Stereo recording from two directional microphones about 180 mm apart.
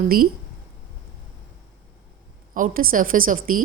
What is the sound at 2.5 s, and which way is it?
A woman's voice, 50° right (ahead or behind).